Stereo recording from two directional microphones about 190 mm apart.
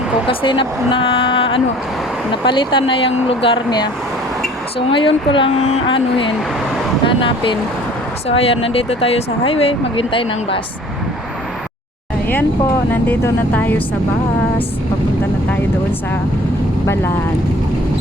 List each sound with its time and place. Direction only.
0.3 s speech: 25° left (ahead or behind)
4.9 s speech: 25° left (ahead or behind)
12.9 s speech: 10° left (ahead or behind)
16.8 s speech: 15° left (ahead or behind)